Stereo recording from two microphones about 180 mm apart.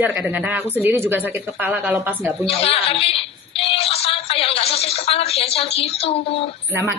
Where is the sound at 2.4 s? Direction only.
35° left (ahead or behind).